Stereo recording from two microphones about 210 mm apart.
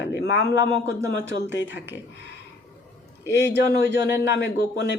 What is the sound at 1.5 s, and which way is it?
Speech, 60° left (ahead or behind).